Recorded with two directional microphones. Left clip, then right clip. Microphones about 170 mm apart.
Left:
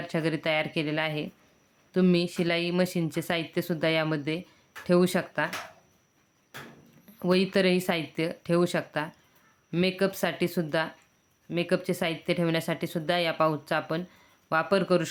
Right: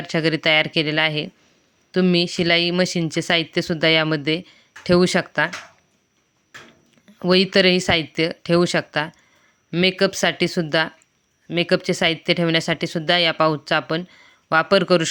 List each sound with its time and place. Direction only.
0.1 s speech: 30° right (ahead or behind)
7.2 s speech: 30° right (ahead or behind)